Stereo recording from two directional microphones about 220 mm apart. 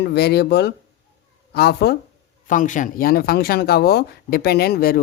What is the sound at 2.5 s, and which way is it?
Speech, 35° left (ahead or behind).